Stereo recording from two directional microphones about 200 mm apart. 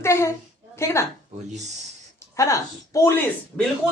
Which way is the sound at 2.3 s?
15° left (ahead or behind).